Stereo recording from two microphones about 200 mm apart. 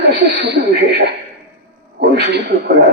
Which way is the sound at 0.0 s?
55° right (ahead or behind).